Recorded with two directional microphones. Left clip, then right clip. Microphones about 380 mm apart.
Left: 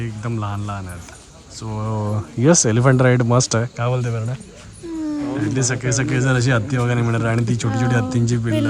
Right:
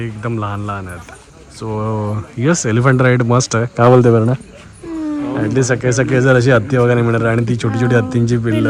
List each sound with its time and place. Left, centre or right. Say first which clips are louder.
0.0 s speech: right 6 dB; centre
3.8 s speech: right 15 dB; right
5.4 s speech: right 10 dB; centre